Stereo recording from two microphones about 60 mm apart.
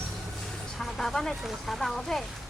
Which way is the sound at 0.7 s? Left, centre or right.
Centre.